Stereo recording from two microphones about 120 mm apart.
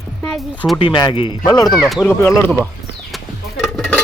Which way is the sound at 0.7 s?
40° left (ahead or behind).